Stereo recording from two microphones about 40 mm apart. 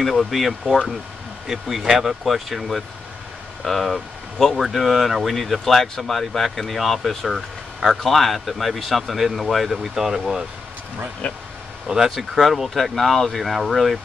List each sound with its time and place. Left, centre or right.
0.0 s speech: centre
9.9 s speech: centre
11.2 s speech: left
12.2 s speech: centre